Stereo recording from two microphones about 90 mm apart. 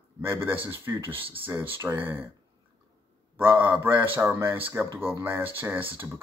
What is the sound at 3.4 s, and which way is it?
Speech, 20° right (ahead or behind).